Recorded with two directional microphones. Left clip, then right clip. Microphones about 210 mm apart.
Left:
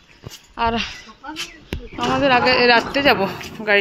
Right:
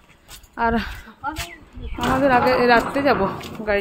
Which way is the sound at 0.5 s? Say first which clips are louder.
Left 1 dB; 20° right (ahead or behind).